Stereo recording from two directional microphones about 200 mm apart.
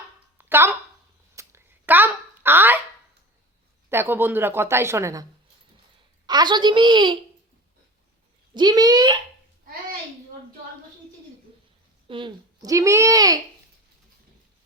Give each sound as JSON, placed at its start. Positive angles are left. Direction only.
{"t": 0.3, "sound": "a sound", "side_deg": -10}
{"t": 3.8, "sound": "a woman's voice", "side_deg": -10}
{"t": 6.2, "sound": "a woman's voice", "side_deg": -20}
{"t": 8.5, "sound": "a woman's voice", "side_deg": -20}
{"t": 12.0, "sound": "a woman's voice", "side_deg": -25}